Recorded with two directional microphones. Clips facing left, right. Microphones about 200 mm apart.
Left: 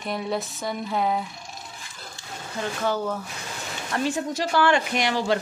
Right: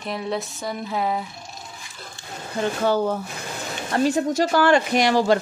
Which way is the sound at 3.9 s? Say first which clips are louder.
Right 6 dB; 40° right (ahead or behind).